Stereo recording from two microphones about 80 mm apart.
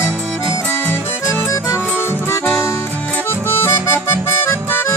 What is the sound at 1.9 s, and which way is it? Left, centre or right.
Music, left.